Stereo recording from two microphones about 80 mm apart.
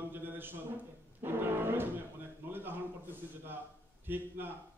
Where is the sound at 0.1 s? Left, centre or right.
Right.